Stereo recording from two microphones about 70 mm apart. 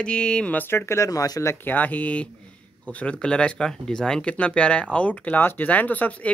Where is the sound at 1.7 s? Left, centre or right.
Left.